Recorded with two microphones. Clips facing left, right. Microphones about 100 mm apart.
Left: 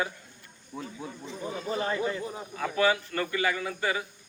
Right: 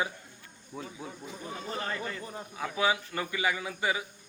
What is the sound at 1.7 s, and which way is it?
Speech, 15° left (ahead or behind).